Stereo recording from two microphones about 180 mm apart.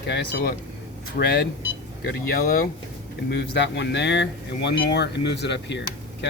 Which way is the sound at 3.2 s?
70° left (ahead or behind).